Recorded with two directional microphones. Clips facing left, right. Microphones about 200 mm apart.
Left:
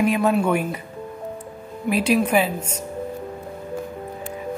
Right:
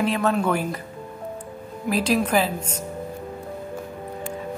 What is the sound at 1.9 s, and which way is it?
Speech, 5° left (ahead or behind).